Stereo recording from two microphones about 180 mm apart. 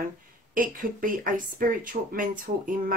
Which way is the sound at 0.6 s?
50° right (ahead or behind).